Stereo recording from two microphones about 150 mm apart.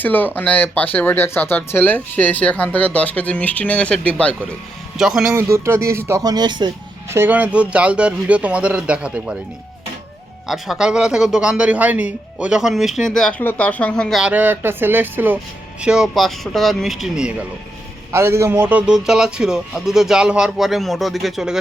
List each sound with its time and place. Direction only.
0.0 s speech: 10° left (ahead or behind)
4.9 s a man's voice: 5° right (ahead or behind)
5.3 s speech: 20° right (ahead or behind)
7.1 s speech: 15° right (ahead or behind)
10.4 s a man's voice: centre (ahead or behind)
14.2 s a man's voice: 10° right (ahead or behind)
18.1 s a man's voice: 20° right (ahead or behind); by 21.6 s 5° right (ahead or behind)